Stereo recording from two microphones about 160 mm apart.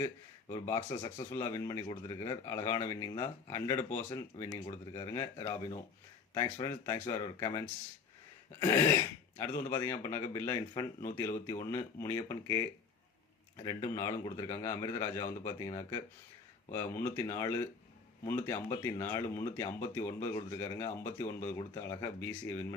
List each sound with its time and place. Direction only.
0.5 s a man's voice: 20° left (ahead or behind)
8.6 s a man's voice: 20° left (ahead or behind)